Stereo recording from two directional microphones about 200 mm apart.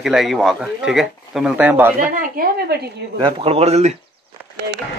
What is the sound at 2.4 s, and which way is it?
Speech, 45° right (ahead or behind).